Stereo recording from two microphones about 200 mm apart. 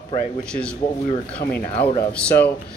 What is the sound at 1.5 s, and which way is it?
Speech, 35° left (ahead or behind).